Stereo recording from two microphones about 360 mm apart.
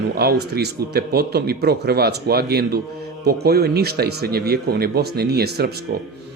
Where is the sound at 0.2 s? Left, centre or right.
Right.